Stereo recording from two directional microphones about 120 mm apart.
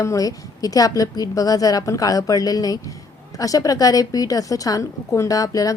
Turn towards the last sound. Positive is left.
turn(degrees=30)  # may be behind; listen again after turning